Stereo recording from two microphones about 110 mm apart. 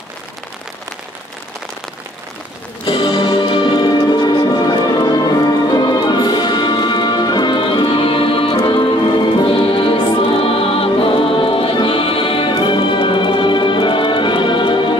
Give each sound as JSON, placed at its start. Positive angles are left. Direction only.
{"t": 2.8, "sound": "music", "side_deg": 50}